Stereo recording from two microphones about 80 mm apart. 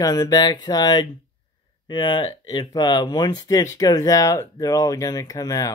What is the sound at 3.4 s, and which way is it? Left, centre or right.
Speech, left.